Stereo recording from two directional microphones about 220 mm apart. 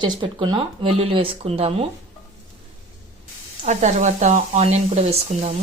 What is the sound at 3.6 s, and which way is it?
Speech, 30° right (ahead or behind).